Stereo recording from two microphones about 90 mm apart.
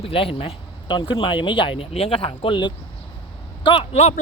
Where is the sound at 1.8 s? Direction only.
90° left; by 2.7 s 65° left (ahead or behind).